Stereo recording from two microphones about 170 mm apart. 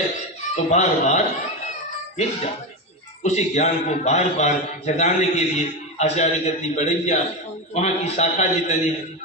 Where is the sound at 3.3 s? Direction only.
45° left (ahead or behind).